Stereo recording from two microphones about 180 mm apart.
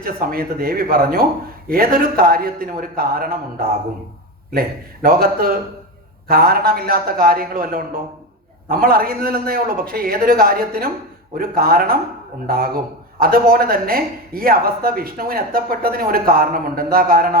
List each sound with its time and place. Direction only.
0.0 s speech: 55° right (ahead or behind)
5.0 s speech: 55° right (ahead or behind)